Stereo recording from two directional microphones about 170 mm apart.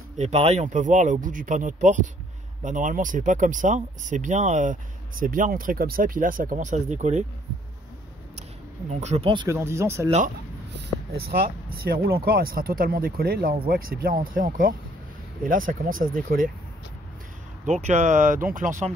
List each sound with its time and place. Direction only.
0.2 s speech: 40° right (ahead or behind)
9.0 s speech: 40° right (ahead or behind)
9.5 s speech: 15° right (ahead or behind)
11.2 s speech: 60° right (ahead or behind)
17.6 s speech: 45° right (ahead or behind)